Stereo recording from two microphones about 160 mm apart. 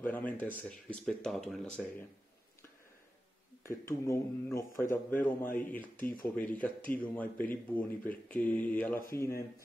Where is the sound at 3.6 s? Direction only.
20° left (ahead or behind).